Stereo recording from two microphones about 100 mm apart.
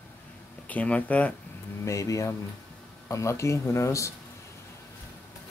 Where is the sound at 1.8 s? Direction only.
30° left (ahead or behind).